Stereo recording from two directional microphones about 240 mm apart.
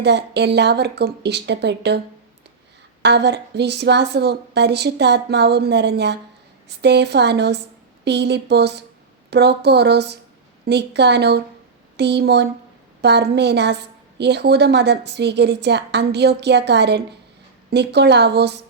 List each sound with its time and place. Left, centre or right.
0.0 s a woman's voice: right
3.0 s a woman's voice: right